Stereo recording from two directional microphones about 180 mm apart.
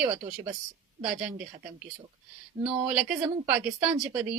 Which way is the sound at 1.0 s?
5° right (ahead or behind).